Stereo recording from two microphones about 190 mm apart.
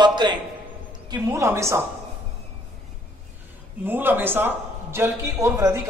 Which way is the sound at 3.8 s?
10° right (ahead or behind).